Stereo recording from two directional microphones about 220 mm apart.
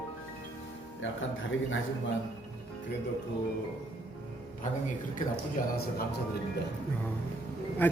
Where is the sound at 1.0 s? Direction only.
60° left (ahead or behind).